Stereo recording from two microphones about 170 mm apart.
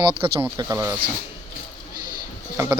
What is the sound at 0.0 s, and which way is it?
Speech, 30° right (ahead or behind).